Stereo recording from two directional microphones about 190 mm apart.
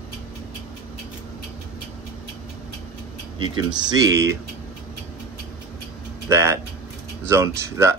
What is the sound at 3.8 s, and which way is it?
Speech, 20° right (ahead or behind).